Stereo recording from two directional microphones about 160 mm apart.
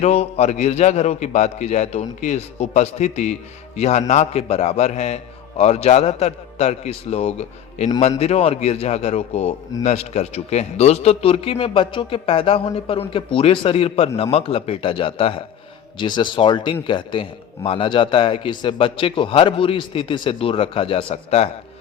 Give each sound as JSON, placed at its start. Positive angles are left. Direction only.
{"t": 0.0, "sound": "a man's voice", "side_deg": 45}